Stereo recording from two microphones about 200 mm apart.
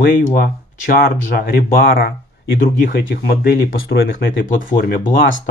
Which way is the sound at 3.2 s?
50° left (ahead or behind).